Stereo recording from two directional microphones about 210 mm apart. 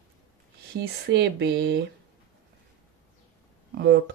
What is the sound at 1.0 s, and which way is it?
Speech, 55° right (ahead or behind).